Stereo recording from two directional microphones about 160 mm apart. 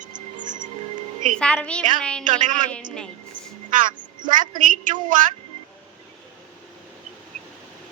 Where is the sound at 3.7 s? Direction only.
55° right (ahead or behind).